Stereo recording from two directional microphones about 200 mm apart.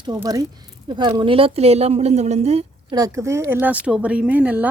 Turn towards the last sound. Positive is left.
turn(degrees=-10)  # may be behind; listen again after turning